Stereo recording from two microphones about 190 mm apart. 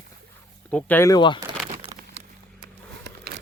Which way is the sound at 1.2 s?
25° left (ahead or behind).